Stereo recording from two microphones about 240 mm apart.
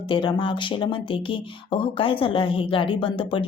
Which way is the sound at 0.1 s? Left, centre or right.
Centre.